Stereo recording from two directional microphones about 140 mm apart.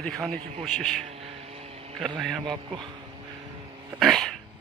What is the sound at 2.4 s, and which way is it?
Speech, 35° right (ahead or behind).